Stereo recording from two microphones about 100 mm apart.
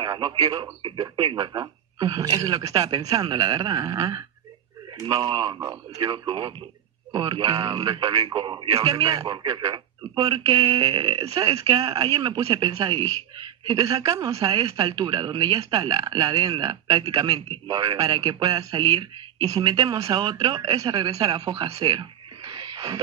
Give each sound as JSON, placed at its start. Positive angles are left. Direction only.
{"t": 0.0, "sound": "speech", "side_deg": -50}
{"t": 14.6, "sound": "speech", "side_deg": -55}
{"t": 22.5, "sound": "music", "side_deg": -45}